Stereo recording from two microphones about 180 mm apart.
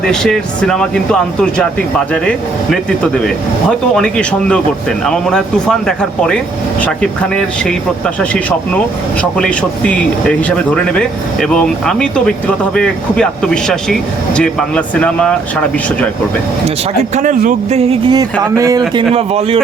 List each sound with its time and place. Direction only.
0.0 s speech: 5° left (ahead or behind)
3.7 s speech: 5° left (ahead or behind)
17.2 s speech: 45° right (ahead or behind)
18.1 s speech: 20° right (ahead or behind)
19.1 s speech: 35° right (ahead or behind)